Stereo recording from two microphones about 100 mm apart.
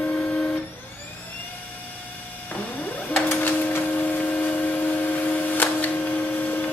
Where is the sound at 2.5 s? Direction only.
15° left (ahead or behind).